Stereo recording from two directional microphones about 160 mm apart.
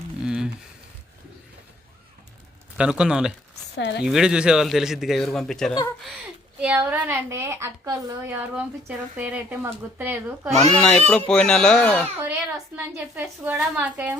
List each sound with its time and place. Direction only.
0.2 s a sound: 5° right (ahead or behind)
2.7 s speech: 5° right (ahead or behind)
3.8 s speech: 90° left
4.0 s speech: 5° right (ahead or behind)
6.6 s a woman's voice: 10° right (ahead or behind)
10.7 s speech: 5° left (ahead or behind)
12.3 s a woman's voice: 10° right (ahead or behind)